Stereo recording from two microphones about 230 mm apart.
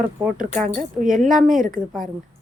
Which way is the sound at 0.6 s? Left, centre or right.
Right.